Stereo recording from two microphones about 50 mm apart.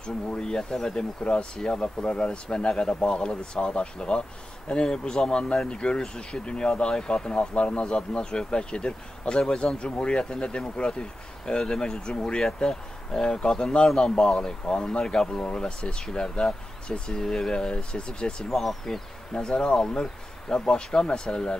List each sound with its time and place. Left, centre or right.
0.0 s speech: centre
18.4 s speech: centre
19.3 s speech: centre